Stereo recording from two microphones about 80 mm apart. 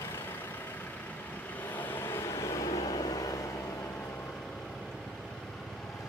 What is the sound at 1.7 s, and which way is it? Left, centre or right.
Vehicle, left.